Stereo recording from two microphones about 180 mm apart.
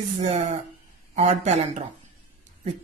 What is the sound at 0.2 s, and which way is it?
Speech, 40° right (ahead or behind).